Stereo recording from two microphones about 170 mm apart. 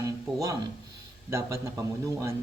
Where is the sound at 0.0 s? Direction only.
20° right (ahead or behind).